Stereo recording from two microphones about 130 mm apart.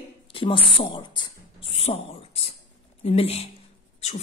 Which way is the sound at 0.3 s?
40° left (ahead or behind).